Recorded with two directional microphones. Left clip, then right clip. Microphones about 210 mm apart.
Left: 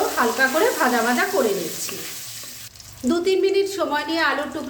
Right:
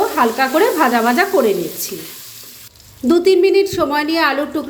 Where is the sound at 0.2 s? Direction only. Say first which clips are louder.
Right 4 dB; 35° right (ahead or behind).